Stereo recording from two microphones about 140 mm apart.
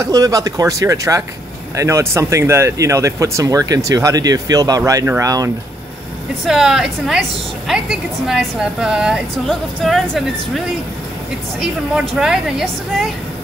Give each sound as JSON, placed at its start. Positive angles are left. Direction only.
{"t": 0.0, "sound": "speech", "side_deg": -25}
{"t": 6.4, "sound": "a woman's voice", "side_deg": -5}
{"t": 11.6, "sound": "a woman's voice", "side_deg": -5}